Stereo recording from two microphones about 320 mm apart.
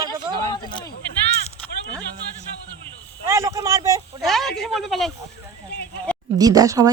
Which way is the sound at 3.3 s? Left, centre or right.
Centre.